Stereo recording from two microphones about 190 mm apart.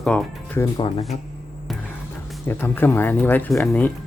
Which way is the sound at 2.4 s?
10° left (ahead or behind).